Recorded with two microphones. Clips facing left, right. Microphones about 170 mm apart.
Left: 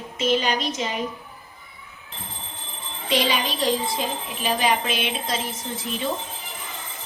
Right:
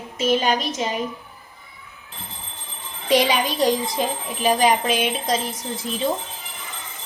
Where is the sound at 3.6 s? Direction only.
45° right (ahead or behind).